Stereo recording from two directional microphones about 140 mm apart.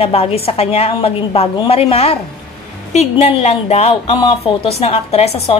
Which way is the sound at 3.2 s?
45° left (ahead or behind).